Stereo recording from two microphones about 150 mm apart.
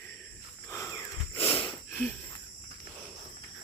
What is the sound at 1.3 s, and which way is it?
Wheeze, 35° left (ahead or behind).